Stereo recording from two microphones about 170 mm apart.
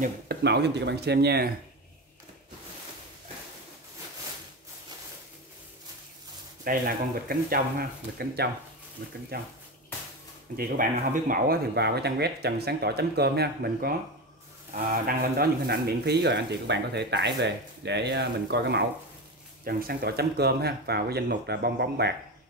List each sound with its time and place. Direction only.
0.0 s speech: 75° right (ahead or behind)
6.6 s speech: 60° right (ahead or behind)
10.5 s speech: 55° right (ahead or behind); by 18.9 s 85° right
19.6 s speech: 60° right (ahead or behind)